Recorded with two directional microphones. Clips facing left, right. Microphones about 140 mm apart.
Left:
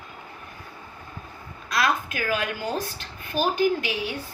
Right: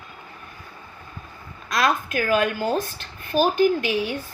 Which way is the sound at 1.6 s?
45° right (ahead or behind).